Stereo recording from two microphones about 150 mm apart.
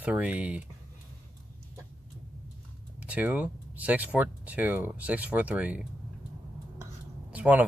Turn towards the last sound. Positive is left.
turn(degrees=-10)  # may be behind; listen again after turning